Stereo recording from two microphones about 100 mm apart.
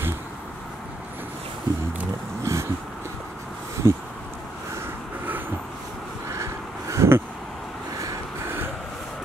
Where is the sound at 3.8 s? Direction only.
25° right (ahead or behind).